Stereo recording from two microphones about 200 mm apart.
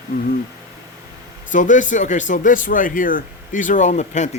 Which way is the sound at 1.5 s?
40° left (ahead or behind).